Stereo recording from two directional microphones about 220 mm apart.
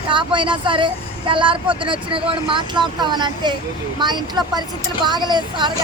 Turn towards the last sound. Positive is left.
turn(degrees=-20)  # may be behind; listen again after turning